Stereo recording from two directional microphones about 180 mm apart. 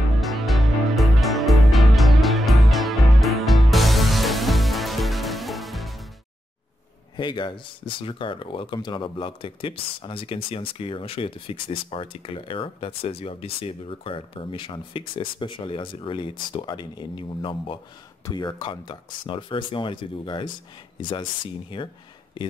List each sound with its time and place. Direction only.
0.2 s music: centre (ahead or behind)
7.2 s speech: 25° left (ahead or behind)